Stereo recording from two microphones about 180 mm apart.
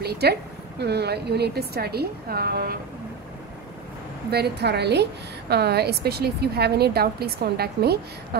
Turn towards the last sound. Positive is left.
turn(degrees=-60)  # may be behind; listen again after turning